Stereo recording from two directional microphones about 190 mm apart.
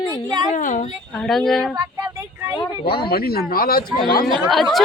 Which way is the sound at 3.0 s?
55° left (ahead or behind).